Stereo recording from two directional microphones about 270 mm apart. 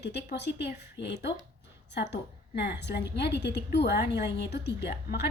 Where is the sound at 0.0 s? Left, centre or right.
Left.